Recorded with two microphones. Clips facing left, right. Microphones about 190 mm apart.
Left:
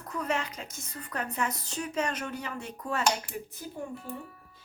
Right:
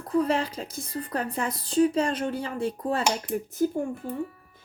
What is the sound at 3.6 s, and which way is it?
Speech, 50° right (ahead or behind).